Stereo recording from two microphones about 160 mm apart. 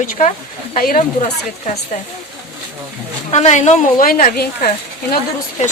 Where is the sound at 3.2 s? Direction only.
45° left (ahead or behind); by 4.7 s 70° left (ahead or behind).